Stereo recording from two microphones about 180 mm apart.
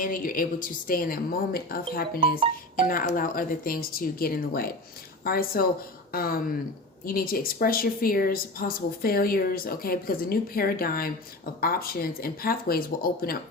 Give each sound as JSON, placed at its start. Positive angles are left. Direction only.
{"t": 0.0, "sound": "a woman's voice", "side_deg": 50}